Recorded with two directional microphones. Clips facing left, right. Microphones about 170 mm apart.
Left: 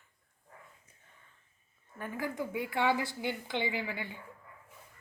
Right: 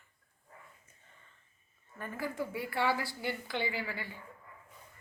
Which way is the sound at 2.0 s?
15° left (ahead or behind).